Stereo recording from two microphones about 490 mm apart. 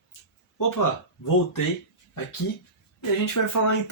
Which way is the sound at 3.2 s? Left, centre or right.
Left.